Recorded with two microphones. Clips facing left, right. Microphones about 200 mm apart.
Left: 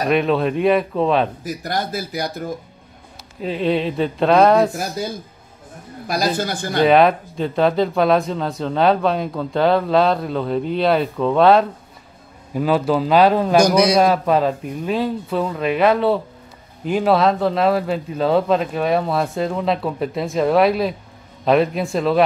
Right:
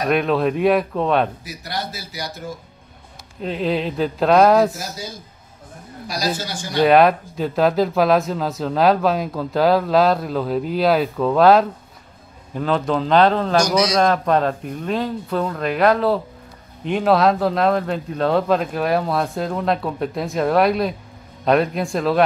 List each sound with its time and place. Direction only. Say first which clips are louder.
0.1 s speech: even; centre (ahead or behind)
1.4 s speech: left 5 dB; 50° left (ahead or behind)
3.3 s speech: left 2 dB; centre (ahead or behind)
4.7 s a woman's voice: left 6 dB; 55° left (ahead or behind)
6.8 s a man's voice: even; centre (ahead or behind)
13.6 s a woman's voice: left 5 dB; 55° left (ahead or behind)
13.9 s speech: left 2 dB; 5° left (ahead or behind)